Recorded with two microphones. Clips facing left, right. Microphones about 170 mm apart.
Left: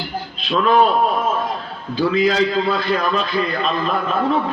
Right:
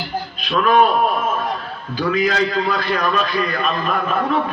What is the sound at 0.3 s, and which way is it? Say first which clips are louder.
Speech: even; 25° left (ahead or behind).